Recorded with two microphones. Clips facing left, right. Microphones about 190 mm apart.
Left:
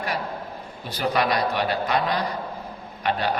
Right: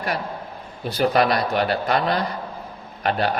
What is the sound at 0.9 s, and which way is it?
A man's voice, 50° right (ahead or behind).